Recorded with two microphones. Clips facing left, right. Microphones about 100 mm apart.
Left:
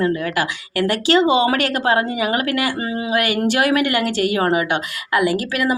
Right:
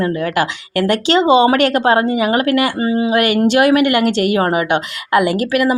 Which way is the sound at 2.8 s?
25° right (ahead or behind).